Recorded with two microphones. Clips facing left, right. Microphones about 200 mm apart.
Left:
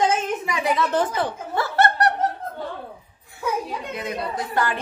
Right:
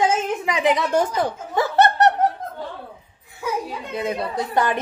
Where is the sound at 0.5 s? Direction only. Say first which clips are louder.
Right 3 dB; 20° right (ahead or behind).